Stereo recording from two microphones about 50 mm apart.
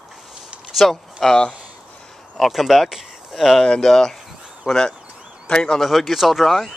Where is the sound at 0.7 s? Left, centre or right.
Centre.